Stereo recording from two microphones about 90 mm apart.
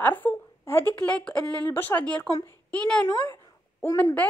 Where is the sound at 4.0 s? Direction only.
20° left (ahead or behind).